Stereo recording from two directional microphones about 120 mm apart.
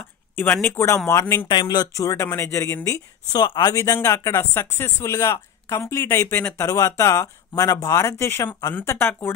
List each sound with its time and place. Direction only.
0.4 s speech: 15° left (ahead or behind)
1.5 s speech: 35° left (ahead or behind)
2.0 s speech: 25° left (ahead or behind)
3.3 s speech: 35° left (ahead or behind); by 6.6 s 15° left (ahead or behind)
6.6 s speech: 30° left (ahead or behind)